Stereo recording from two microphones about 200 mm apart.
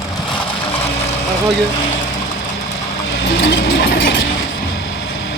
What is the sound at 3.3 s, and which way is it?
Mechanisms, 60° left (ahead or behind).